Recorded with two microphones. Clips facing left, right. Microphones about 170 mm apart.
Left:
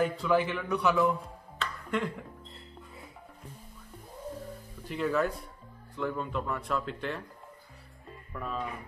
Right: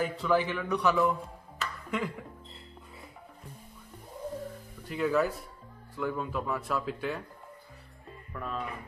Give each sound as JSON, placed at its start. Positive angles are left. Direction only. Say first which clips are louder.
{"t": 0.0, "sound": "speech", "louder": "left 1 dB", "side_deg": 0}
{"t": 1.6, "sound": "finger snapping", "louder": "left 1 dB", "side_deg": -5}
{"t": 4.8, "sound": "speech", "louder": "right 1 dB", "side_deg": 0}
{"t": 8.3, "sound": "speech", "louder": "left 1 dB", "side_deg": 0}